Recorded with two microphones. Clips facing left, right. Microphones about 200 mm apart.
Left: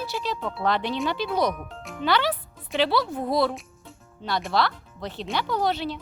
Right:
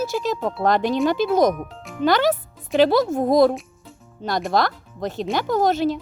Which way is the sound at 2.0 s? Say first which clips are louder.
Right 6 dB; 45° right (ahead or behind).